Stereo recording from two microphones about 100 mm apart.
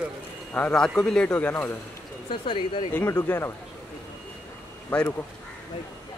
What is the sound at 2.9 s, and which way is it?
Speech, 25° left (ahead or behind).